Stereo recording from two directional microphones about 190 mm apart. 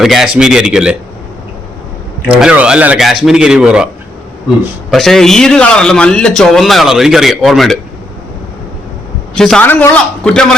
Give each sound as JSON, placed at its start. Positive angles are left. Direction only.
{"t": 0.0, "sound": "a man's voice", "side_deg": 0}
{"t": 2.2, "sound": "a man's voice", "side_deg": -5}
{"t": 4.9, "sound": "a man's voice", "side_deg": 0}
{"t": 9.3, "sound": "a man's voice", "side_deg": 5}